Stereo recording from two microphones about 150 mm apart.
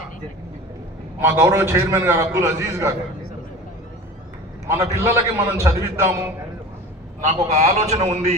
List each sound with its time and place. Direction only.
1.3 s a man's voice: 15° right (ahead or behind)
4.9 s a man's voice: 20° right (ahead or behind)
7.3 s a man's voice: 45° right (ahead or behind)